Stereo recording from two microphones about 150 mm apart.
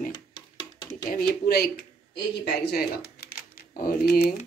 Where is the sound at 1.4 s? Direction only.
90° left; by 4.3 s 75° left (ahead or behind).